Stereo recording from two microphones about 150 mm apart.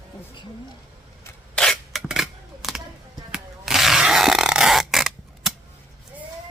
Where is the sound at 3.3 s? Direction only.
5° right (ahead or behind).